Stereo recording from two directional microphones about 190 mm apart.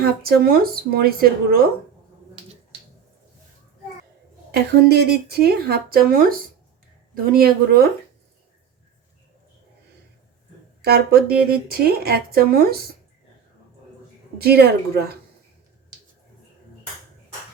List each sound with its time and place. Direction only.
0.0 s speech: 50° right (ahead or behind)
4.5 s speech: 60° right (ahead or behind)
10.8 s speech: 55° right (ahead or behind)
14.3 s speech: 55° right (ahead or behind)